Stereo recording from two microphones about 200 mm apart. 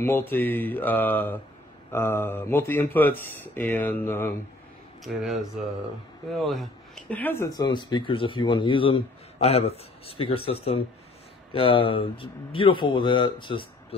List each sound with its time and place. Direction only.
0.0 s speech: 10° left (ahead or behind)
5.0 s speech: centre (ahead or behind); by 13.7 s 25° left (ahead or behind)